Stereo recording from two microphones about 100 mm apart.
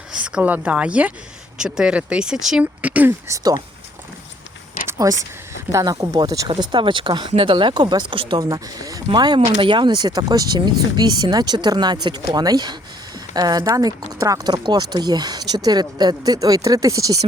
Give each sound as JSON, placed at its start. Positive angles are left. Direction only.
{"t": 0.1, "sound": "speech", "side_deg": -10}
{"t": 2.8, "sound": "speech", "side_deg": -15}
{"t": 3.1, "sound": "speech", "side_deg": -30}
{"t": 4.9, "sound": "a sound", "side_deg": -35}
{"t": 5.7, "sound": "speech", "side_deg": -35}
{"t": 6.6, "sound": "speech", "side_deg": -55}
{"t": 8.4, "sound": "speech", "side_deg": -40}